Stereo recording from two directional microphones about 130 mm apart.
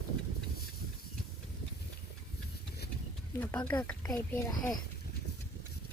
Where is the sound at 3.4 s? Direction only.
10° left (ahead or behind).